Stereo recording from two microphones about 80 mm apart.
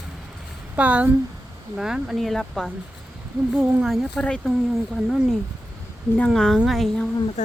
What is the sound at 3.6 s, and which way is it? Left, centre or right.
Speech, centre.